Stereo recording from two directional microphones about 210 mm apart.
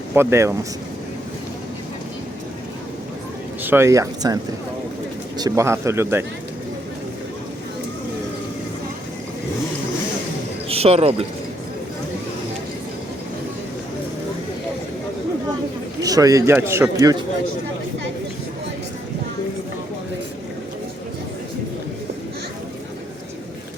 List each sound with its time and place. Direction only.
0.1 s speech: 10° right (ahead or behind)
3.6 s a man's voice: 10° right (ahead or behind)
5.4 s a man's voice: 15° right (ahead or behind)
10.7 s speech: 30° right (ahead or behind)
16.0 s a man's voice: 15° right (ahead or behind)